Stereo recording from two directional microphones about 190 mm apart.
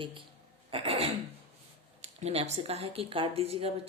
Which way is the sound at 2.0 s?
35° right (ahead or behind).